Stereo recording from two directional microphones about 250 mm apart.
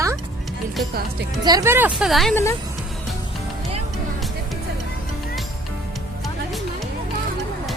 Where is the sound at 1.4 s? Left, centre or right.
Centre.